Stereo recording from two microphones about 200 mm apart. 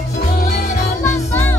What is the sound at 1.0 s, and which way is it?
Music, 10° left (ahead or behind).